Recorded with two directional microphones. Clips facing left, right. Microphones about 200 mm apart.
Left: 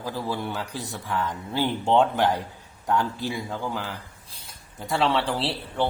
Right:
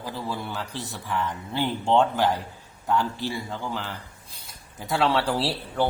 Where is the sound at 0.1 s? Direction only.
10° left (ahead or behind).